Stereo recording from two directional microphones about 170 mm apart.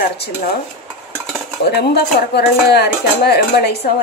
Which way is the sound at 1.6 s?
70° left (ahead or behind).